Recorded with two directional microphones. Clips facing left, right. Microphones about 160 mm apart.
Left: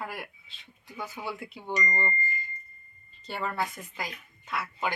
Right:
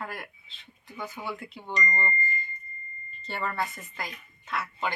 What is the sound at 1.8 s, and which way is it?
Speech, 15° left (ahead or behind).